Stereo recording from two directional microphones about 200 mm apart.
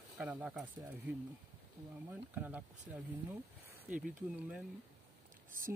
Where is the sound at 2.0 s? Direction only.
10° right (ahead or behind).